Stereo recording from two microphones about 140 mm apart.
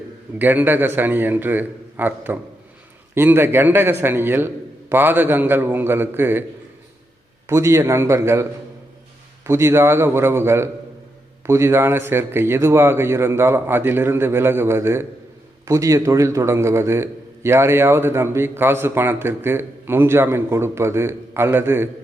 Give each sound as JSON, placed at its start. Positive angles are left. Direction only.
{"t": 0.3, "sound": "a man's voice", "side_deg": -15}
{"t": 7.4, "sound": "a man's voice", "side_deg": -20}